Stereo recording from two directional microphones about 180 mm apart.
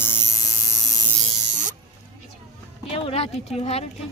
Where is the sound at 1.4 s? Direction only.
40° right (ahead or behind).